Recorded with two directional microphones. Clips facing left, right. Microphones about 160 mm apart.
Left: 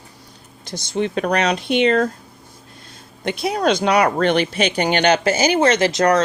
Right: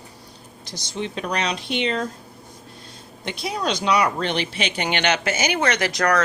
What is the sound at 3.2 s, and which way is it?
Speech, 55° left (ahead or behind).